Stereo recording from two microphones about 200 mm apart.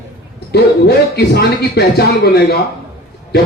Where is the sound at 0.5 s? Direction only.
55° left (ahead or behind).